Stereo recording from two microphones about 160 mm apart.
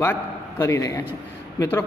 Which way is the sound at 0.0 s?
15° left (ahead or behind).